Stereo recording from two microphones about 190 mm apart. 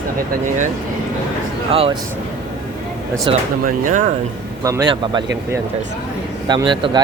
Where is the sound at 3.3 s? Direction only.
25° right (ahead or behind).